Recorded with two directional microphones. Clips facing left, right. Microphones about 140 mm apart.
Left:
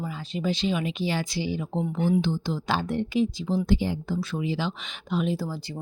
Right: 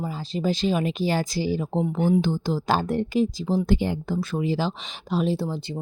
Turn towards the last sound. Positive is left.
turn(degrees=-30)  # may be behind; listen again after turning